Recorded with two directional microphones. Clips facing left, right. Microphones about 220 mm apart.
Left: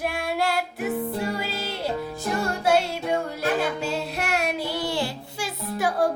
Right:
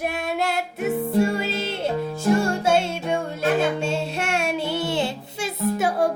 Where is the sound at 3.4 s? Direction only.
20° right (ahead or behind).